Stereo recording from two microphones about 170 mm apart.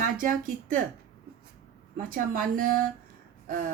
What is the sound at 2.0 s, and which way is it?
Speech, 55° right (ahead or behind).